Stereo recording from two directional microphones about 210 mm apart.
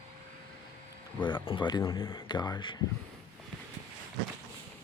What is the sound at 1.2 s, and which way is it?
Speech, 20° left (ahead or behind).